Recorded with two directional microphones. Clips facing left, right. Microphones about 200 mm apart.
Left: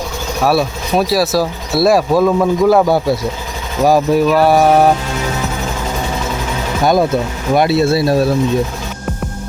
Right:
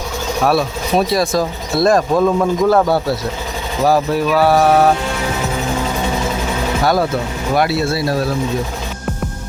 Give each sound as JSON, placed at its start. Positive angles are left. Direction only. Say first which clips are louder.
{"t": 0.4, "sound": "speech", "louder": "left 2 dB", "side_deg": 5}
{"t": 6.8, "sound": "speech", "louder": "left 5 dB", "side_deg": 20}